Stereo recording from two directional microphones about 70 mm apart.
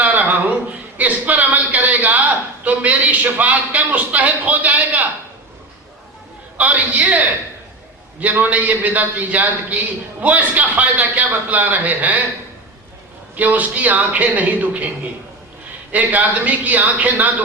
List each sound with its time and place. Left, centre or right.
0.0 s a sound: right
2.6 s a man's voice: right
6.6 s a man's voice: right
13.3 s a man's voice: right
15.9 s a man's voice: right